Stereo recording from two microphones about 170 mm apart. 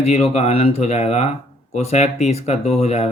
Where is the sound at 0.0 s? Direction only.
40° left (ahead or behind).